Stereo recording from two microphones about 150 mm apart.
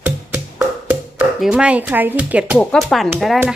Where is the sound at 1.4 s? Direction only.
5° right (ahead or behind).